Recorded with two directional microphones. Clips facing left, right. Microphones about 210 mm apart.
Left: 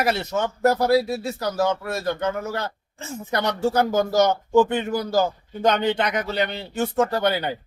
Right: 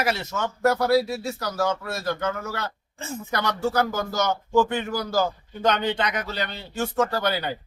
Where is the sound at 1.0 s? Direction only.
35° left (ahead or behind).